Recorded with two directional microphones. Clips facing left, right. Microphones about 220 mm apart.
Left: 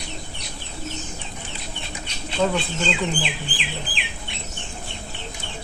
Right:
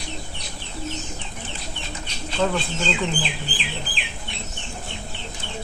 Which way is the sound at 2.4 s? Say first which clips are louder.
Left 1 dB; centre (ahead or behind).